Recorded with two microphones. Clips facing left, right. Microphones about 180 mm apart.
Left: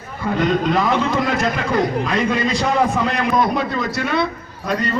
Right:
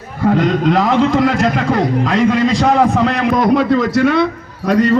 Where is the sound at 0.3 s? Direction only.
90° right.